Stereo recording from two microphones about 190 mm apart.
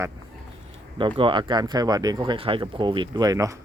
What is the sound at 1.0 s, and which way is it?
Speech, 25° right (ahead or behind).